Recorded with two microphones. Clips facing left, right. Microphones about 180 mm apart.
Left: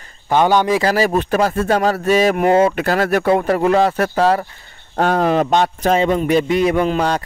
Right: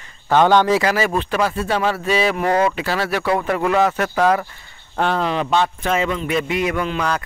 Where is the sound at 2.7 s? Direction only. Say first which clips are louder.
Left 5 dB; 50° left (ahead or behind).